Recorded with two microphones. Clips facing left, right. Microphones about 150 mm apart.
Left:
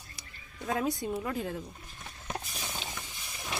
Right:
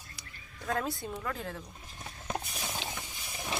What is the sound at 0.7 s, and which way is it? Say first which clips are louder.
Speech: left 3 dB; 15° left (ahead or behind).